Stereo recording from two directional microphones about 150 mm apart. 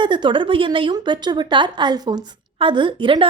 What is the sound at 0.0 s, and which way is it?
Speech, 30° right (ahead or behind).